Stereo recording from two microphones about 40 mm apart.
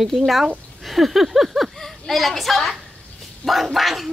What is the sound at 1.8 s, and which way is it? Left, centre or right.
A child's voice, centre.